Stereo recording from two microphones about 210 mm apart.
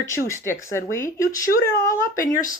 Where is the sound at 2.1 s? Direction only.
40° left (ahead or behind).